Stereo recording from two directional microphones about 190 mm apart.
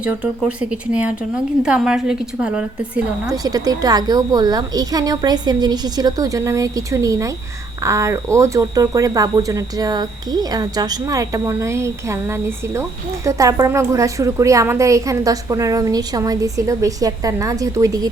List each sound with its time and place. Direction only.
0.0 s a woman's voice: 5° right (ahead or behind)
3.2 s a woman's voice: 20° right (ahead or behind)